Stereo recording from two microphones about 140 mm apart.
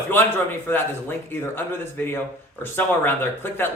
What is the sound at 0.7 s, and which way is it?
Speech, 15° left (ahead or behind).